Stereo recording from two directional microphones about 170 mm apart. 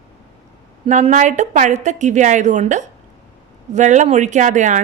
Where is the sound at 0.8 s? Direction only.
45° right (ahead or behind).